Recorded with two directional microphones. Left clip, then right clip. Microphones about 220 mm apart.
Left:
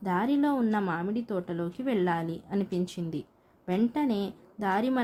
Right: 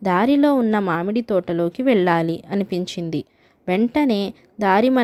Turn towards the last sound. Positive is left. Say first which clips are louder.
# right 12 dB
turn(degrees=-35)  # may be behind; listen again after turning